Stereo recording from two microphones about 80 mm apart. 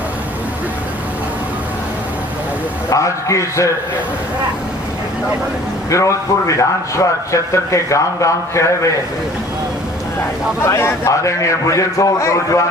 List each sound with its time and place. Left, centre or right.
2.9 s a man's voice: left
5.9 s a man's voice: left
10.6 s a man's voice: left